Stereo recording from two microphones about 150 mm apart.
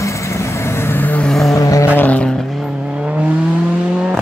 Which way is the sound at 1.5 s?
20° left (ahead or behind).